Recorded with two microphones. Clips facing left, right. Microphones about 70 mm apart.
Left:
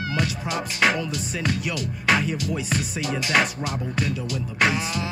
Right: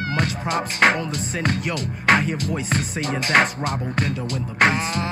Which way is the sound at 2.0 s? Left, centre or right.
Right.